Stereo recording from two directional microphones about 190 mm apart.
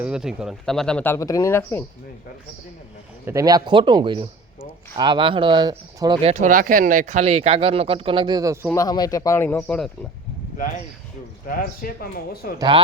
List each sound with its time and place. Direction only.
0.0 s speech: 5° right (ahead or behind); by 1.8 s 15° left (ahead or behind)
3.2 s speech: 20° right (ahead or behind)
6.2 s speech: 40° right (ahead or behind); by 8.5 s 20° right (ahead or behind)
8.7 s speech: 20° left (ahead or behind)
11.4 s speech: 50° left (ahead or behind)
12.5 s speech: 25° right (ahead or behind)